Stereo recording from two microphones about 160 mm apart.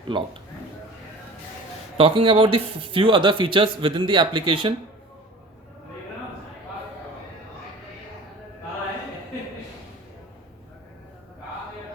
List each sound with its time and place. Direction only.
0.1 s speech: 30° right (ahead or behind)
2.0 s speech: 35° right (ahead or behind)